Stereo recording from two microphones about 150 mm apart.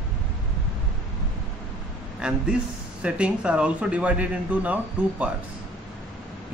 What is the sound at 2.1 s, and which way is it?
A man's voice, 5° right (ahead or behind).